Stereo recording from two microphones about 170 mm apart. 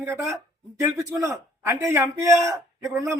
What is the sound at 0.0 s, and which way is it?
A man's voice, 20° right (ahead or behind).